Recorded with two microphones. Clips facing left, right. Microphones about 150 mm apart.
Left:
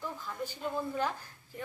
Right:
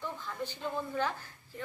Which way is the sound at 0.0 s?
10° left (ahead or behind).